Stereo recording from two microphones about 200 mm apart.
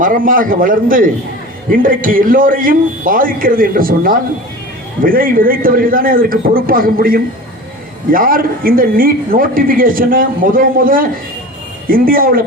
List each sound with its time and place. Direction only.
0.0 s speech: 45° right (ahead or behind)